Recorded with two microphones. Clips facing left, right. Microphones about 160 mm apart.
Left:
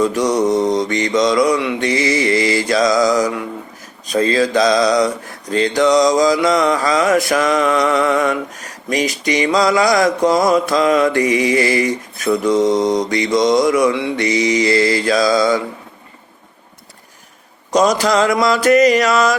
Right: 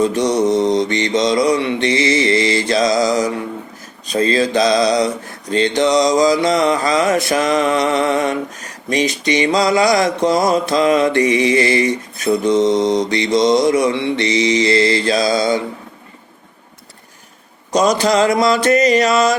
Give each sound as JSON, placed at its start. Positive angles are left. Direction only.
{"t": 0.0, "sound": "mantra", "side_deg": -25}
{"t": 17.7, "sound": "mantra", "side_deg": -25}